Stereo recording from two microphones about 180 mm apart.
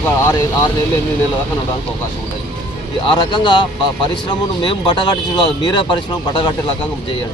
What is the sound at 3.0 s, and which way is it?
Speech, 25° left (ahead or behind).